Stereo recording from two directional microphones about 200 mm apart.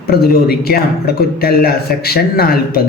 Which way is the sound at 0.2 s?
50° left (ahead or behind).